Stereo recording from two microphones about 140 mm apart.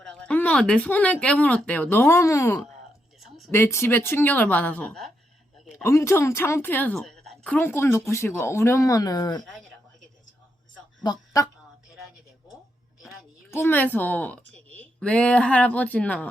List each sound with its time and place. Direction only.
0.0 s speech: 5° left (ahead or behind)
5.8 s a woman's voice: 20° left (ahead or behind)
11.0 s a sound: 30° left (ahead or behind)
13.5 s a woman's voice: 15° left (ahead or behind)